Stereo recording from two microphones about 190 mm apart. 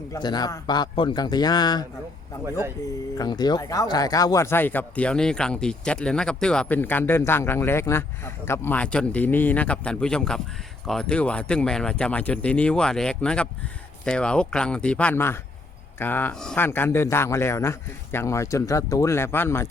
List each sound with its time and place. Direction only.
0.1 s a man's voice: 20° left (ahead or behind)
3.2 s speech: 20° left (ahead or behind)